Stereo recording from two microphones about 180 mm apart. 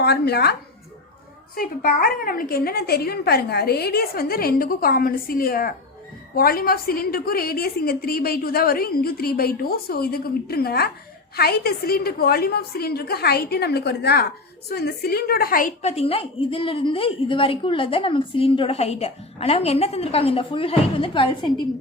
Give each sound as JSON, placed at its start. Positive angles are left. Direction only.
{"t": 0.0, "sound": "speech", "side_deg": 65}
{"t": 1.5, "sound": "a woman's voice", "side_deg": 55}
{"t": 15.8, "sound": "a woman's voice", "side_deg": 35}